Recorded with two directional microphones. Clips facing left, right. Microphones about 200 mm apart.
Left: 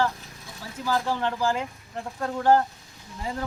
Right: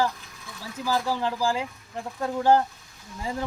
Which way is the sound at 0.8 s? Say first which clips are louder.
Even; 5° right (ahead or behind).